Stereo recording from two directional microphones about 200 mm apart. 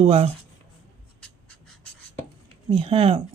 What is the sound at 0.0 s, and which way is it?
Speech, 30° right (ahead or behind).